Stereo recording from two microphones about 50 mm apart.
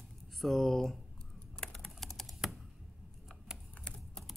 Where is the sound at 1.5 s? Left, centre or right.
Centre.